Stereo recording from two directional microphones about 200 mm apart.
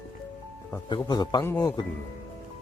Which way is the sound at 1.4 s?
10° left (ahead or behind).